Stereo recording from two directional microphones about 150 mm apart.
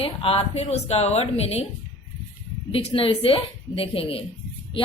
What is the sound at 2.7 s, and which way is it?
Speech, 40° left (ahead or behind).